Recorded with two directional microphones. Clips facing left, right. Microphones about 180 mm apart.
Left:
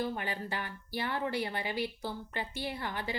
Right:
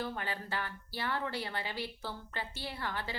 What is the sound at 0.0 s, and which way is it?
Speech, 15° left (ahead or behind).